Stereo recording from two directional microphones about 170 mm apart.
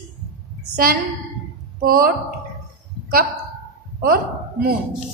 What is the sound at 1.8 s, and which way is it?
Speech, 60° right (ahead or behind).